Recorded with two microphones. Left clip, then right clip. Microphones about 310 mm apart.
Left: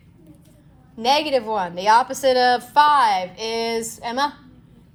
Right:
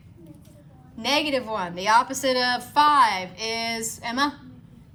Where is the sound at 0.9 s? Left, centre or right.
Centre.